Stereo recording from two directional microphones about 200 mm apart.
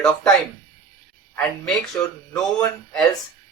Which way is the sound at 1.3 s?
10° left (ahead or behind).